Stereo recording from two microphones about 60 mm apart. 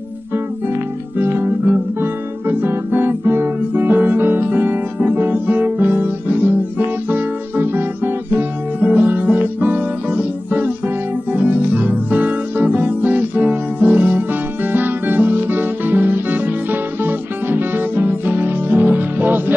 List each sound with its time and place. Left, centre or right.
1.1 s music: right
7.1 s guitar: right
11.3 s music: right